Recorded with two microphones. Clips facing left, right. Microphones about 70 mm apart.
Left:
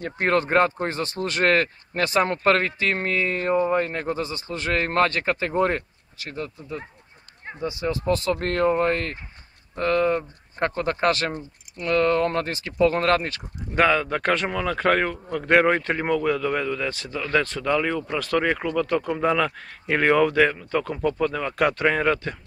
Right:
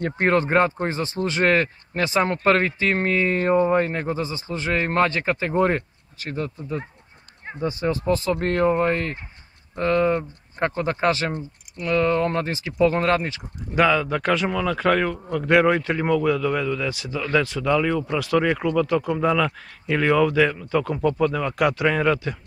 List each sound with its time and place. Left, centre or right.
0.2 s speech: right
8.1 s speech: right
13.7 s speech: centre
14.2 s speech: centre
14.5 s a man's voice: centre
16.9 s speech: centre
17.6 s a man's voice: centre
17.9 s speech: centre
18.4 s a man's voice: centre
18.8 s speech: centre
19.9 s speech: left
20.7 s speech: centre
21.8 s a man's voice: centre
22.1 s speech: centre